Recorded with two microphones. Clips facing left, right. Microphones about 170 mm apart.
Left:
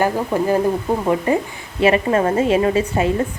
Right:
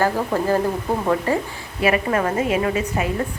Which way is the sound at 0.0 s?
15° left (ahead or behind).